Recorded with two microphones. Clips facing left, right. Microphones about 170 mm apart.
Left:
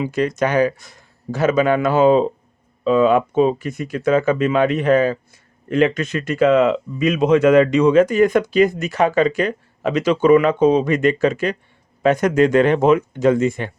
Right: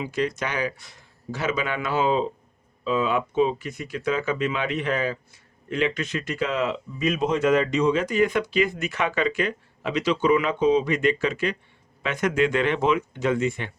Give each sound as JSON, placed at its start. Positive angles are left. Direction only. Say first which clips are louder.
{"t": 0.0, "sound": "speech", "louder": "left 7 dB", "side_deg": 50}